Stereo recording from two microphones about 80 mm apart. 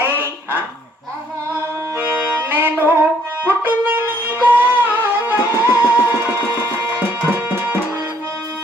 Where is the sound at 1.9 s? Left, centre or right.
Right.